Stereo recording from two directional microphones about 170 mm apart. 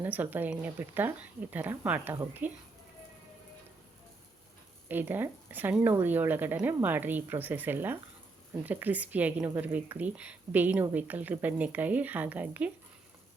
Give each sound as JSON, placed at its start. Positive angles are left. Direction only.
{"t": 0.0, "sound": "speech", "side_deg": -10}
{"t": 4.9, "sound": "speech", "side_deg": -10}